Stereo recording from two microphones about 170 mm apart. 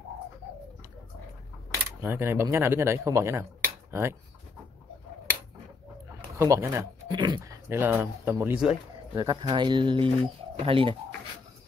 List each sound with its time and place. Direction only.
2.0 s speech: 15° right (ahead or behind)
6.3 s speech: 15° right (ahead or behind)
7.7 s speech: 10° right (ahead or behind)
9.1 s speech: 20° right (ahead or behind)